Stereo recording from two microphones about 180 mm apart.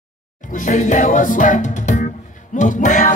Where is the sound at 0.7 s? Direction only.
45° left (ahead or behind).